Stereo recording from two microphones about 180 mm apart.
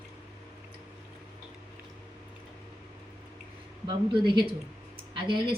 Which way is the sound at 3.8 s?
25° right (ahead or behind).